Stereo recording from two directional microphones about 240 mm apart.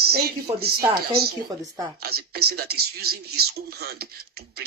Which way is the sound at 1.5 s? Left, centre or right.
Centre.